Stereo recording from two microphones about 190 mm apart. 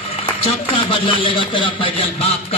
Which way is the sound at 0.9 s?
25° left (ahead or behind).